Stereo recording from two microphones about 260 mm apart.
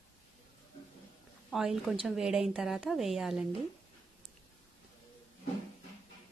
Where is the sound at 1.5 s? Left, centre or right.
Centre.